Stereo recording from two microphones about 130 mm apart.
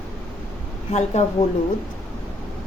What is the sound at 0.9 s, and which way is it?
Speech, 60° left (ahead or behind).